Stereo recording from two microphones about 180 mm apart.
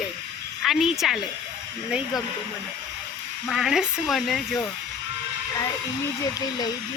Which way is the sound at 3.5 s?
Centre (ahead or behind).